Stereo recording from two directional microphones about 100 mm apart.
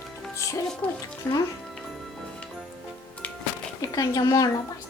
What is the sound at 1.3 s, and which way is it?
Speech, 25° left (ahead or behind).